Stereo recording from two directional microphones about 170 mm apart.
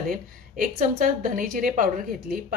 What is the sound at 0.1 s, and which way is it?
A woman's voice, 55° right (ahead or behind).